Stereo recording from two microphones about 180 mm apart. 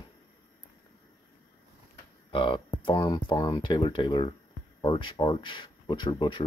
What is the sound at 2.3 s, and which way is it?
Speech, 25° left (ahead or behind).